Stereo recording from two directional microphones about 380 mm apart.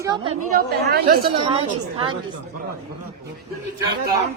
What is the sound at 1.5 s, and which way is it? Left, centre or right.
Speech, centre.